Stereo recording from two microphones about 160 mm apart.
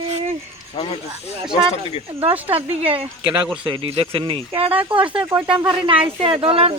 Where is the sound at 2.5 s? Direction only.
35° right (ahead or behind).